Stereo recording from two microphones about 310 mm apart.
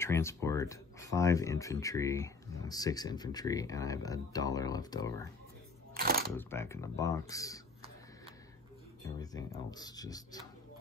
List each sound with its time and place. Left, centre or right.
0.0 s speech: centre
5.9 s coin: right
6.3 s speech: centre
9.0 s speech: centre